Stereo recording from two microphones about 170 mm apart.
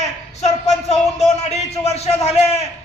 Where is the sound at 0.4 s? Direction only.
40° left (ahead or behind).